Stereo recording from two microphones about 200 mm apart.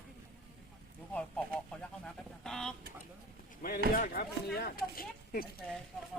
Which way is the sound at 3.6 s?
50° left (ahead or behind).